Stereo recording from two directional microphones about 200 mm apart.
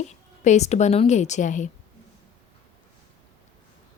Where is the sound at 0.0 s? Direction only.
35° left (ahead or behind).